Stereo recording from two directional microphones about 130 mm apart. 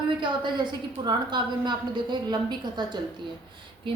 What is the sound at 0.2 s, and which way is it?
A woman's voice, 35° right (ahead or behind).